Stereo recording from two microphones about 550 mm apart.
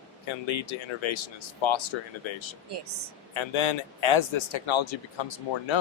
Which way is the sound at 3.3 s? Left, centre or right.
Left.